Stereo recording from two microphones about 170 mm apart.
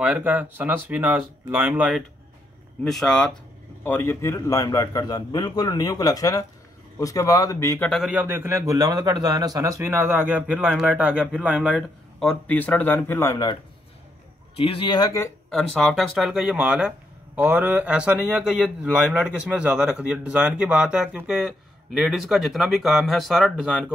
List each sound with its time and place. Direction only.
0.0 s a man's voice: 10° right (ahead or behind); by 7.9 s 15° left (ahead or behind)
7.9 s a man's voice: 5° right (ahead or behind); by 13.6 s 20° left (ahead or behind)
14.6 s a man's voice: 30° left (ahead or behind)
15.5 s a man's voice: centre (ahead or behind)